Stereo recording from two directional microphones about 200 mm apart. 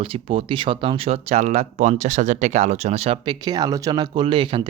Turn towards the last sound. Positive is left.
turn(degrees=-25)  # may be behind; listen again after turning